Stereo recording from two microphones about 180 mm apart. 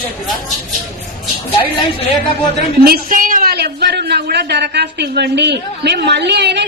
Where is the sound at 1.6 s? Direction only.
30° left (ahead or behind).